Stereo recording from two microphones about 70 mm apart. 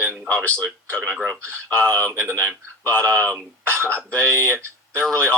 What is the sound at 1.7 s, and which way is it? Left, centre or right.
Speech, left.